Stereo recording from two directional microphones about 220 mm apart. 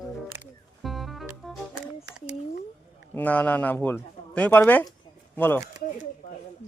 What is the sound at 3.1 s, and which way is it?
Speech, 5° left (ahead or behind).